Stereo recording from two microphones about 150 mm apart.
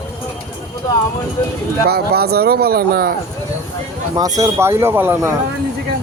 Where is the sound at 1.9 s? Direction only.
90° right.